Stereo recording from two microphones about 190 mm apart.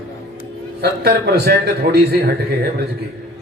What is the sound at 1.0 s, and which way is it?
A man's voice, 55° right (ahead or behind).